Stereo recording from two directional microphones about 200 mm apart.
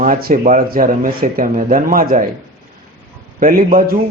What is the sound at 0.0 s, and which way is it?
A man's voice, 45° right (ahead or behind).